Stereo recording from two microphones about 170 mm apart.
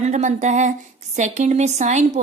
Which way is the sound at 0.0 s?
45° right (ahead or behind).